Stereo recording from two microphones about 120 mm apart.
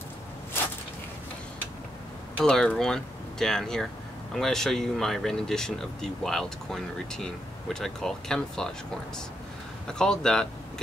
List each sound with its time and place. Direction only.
2.3 s speech: 5° left (ahead or behind)
9.8 s speech: 5° left (ahead or behind)